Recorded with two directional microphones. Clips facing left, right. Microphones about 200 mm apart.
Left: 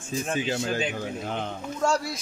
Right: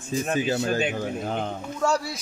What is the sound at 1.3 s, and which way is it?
Speech, 40° right (ahead or behind).